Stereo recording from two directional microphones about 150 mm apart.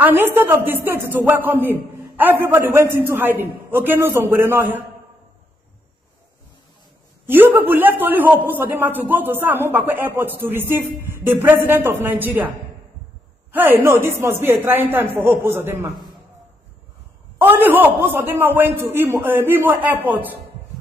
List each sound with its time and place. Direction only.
0.0 s a man's voice: 15° right (ahead or behind)
7.2 s a man's voice: 15° right (ahead or behind)
17.4 s a man's voice: 15° right (ahead or behind)